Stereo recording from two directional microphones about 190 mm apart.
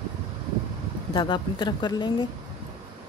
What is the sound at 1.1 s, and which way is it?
Speech, 25° left (ahead or behind).